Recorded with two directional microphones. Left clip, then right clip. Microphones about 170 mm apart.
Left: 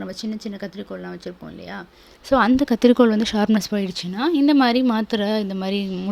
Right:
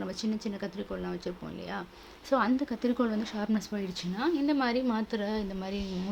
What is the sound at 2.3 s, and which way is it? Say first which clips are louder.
A woman's voice: left 11 dB; 55° left (ahead or behind).